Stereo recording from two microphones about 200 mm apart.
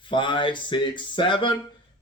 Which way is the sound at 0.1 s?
25° left (ahead or behind).